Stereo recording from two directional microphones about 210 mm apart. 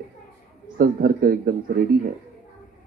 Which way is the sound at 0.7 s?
40° right (ahead or behind).